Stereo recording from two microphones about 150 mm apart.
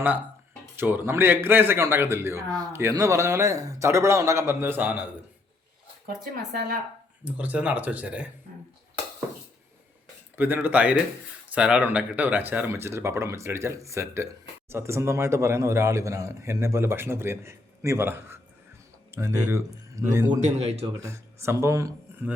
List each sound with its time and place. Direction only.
0.8 s a man's voice: 15° right (ahead or behind)
7.3 s a man's voice: 10° right (ahead or behind)
10.3 s a man's voice: 15° right (ahead or behind)
20.4 s speech: 45° right (ahead or behind)
21.0 s speech: 20° right (ahead or behind)